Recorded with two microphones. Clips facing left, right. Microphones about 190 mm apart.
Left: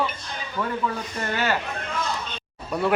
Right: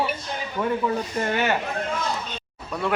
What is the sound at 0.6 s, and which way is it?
Speech, 30° right (ahead or behind).